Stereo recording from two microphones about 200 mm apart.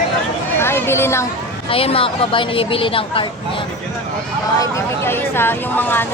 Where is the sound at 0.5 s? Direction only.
10° left (ahead or behind).